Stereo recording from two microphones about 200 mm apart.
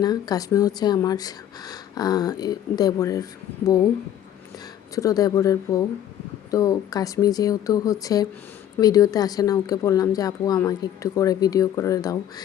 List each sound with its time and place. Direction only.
0.0 s speech: 20° left (ahead or behind)
4.9 s speech: 15° left (ahead or behind)